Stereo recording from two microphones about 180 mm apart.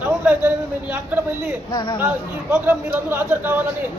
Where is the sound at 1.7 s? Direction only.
25° left (ahead or behind).